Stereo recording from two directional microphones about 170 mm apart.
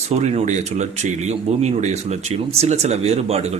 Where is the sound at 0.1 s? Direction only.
40° right (ahead or behind).